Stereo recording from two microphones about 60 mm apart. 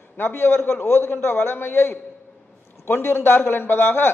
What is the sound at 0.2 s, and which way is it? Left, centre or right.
A man's voice, left.